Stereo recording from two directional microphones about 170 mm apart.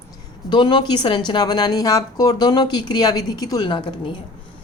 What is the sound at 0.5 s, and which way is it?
Speech, 25° left (ahead or behind).